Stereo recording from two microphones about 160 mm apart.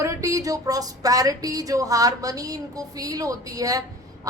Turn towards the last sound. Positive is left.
turn(degrees=-20)  # may be behind; listen again after turning